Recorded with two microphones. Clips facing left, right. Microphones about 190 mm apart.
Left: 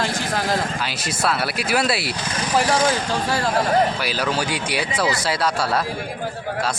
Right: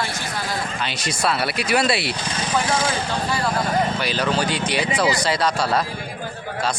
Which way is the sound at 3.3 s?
40° left (ahead or behind).